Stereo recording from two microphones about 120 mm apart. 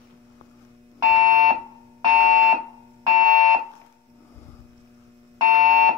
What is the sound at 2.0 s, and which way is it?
Alarm, 35° right (ahead or behind).